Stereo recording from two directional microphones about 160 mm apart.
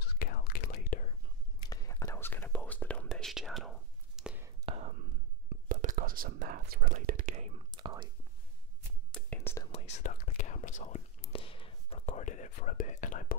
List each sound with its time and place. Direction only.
0.0 s whispering: 70° left (ahead or behind)
1.6 s whispering: 20° left (ahead or behind); by 4.4 s centre (ahead or behind)
4.6 s whispering: 45° right (ahead or behind)
5.7 s whispering: 55° right (ahead or behind)
7.7 s whispering: 30° right (ahead or behind)
9.1 s whispering: 10° left (ahead or behind)
9.7 s whispering: 35° left (ahead or behind)
10.0 s whispering: 55° left (ahead or behind)
11.3 s a sound: 35° left (ahead or behind)
12.1 s whispering: 50° left (ahead or behind)